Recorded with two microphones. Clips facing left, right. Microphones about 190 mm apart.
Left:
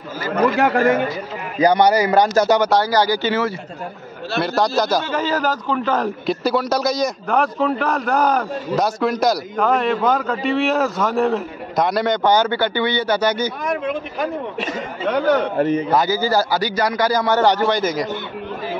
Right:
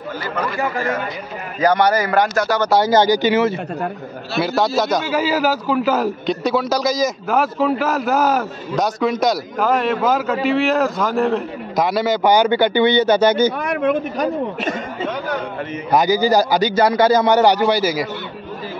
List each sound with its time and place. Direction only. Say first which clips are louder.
0.6 s speech: left 5 dB; 70° left (ahead or behind)
1.6 s a man's voice: left 1 dB; 15° left (ahead or behind)
2.8 s a man's voice: right 4 dB; 20° right (ahead or behind)
4.4 s a man's voice: right 1 dB; centre (ahead or behind); by 13.5 s 25° right (ahead or behind)
15.1 s a man's voice: left 7 dB; 75° left (ahead or behind)
15.9 s a man's voice: right 3 dB; 15° right (ahead or behind)